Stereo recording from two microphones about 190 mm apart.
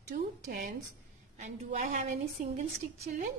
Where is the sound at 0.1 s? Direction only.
50° right (ahead or behind).